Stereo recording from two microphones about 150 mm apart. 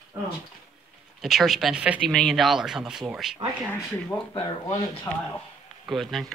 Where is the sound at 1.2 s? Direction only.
Centre (ahead or behind).